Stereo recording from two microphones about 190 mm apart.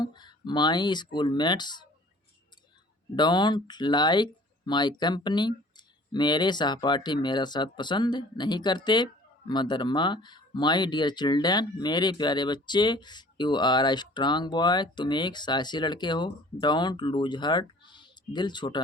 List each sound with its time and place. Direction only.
0.0 s speech: 20° left (ahead or behind)
3.2 s speech: 25° left (ahead or behind)